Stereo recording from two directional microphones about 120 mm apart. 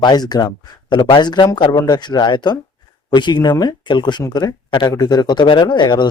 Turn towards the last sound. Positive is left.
turn(degrees=40)  # may be behind; listen again after turning